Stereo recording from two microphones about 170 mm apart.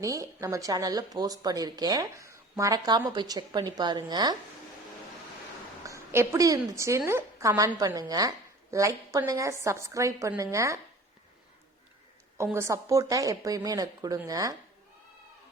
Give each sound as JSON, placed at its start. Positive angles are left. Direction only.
{"t": 0.0, "sound": "speech", "side_deg": -20}
{"t": 5.8, "sound": "a woman's voice", "side_deg": -15}
{"t": 12.5, "sound": "speech", "side_deg": -15}